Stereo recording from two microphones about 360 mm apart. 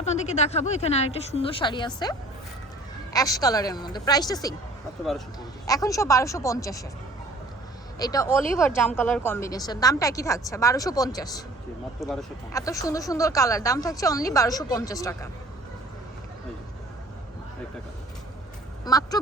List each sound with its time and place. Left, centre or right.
0.0 s speech: centre
5.6 s speech: centre
7.9 s speech: centre
18.9 s a sound: centre